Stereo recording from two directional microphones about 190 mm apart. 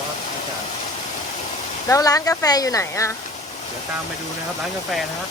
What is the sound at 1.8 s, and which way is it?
Speech, 15° left (ahead or behind).